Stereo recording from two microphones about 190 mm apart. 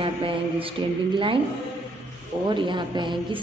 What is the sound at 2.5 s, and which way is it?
Speech, 25° right (ahead or behind).